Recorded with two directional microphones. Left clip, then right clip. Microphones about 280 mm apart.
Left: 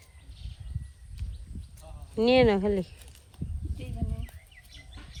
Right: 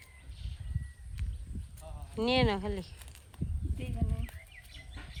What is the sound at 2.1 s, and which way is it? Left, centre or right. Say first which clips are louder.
Speech: left 8 dB; centre.